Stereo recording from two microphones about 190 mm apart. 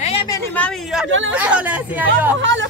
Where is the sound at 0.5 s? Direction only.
5° left (ahead or behind).